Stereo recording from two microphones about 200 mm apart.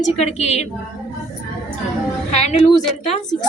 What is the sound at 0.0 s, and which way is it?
Speech, 35° left (ahead or behind).